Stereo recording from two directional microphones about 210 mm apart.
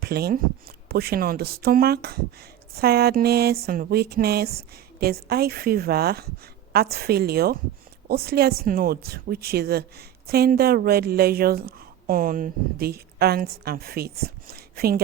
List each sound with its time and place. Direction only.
0.0 s a woman's voice: 50° right (ahead or behind)